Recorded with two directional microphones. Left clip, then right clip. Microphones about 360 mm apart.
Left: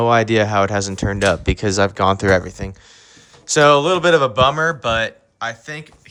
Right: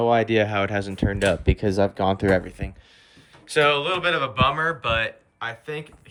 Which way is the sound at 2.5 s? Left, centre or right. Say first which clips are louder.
Left 6 dB; centre.